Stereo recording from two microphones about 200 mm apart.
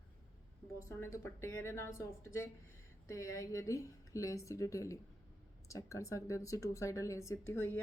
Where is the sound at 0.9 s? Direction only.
15° left (ahead or behind).